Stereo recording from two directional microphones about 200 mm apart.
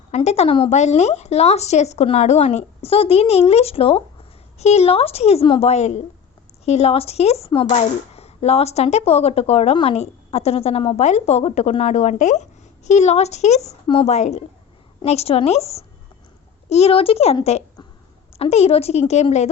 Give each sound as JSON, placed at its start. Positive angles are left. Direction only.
{"t": 0.1, "sound": "a woman's voice", "side_deg": 35}